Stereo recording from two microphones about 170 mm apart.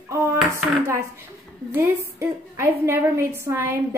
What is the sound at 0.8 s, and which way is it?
A woman's voice, 15° right (ahead or behind).